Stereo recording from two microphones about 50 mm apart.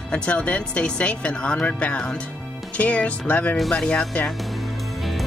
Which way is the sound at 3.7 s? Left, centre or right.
Centre.